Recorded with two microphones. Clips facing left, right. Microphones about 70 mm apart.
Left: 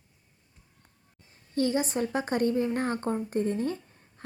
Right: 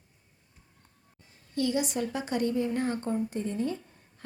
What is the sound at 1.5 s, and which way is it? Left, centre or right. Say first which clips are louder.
A woman's voice: left 2 dB; left.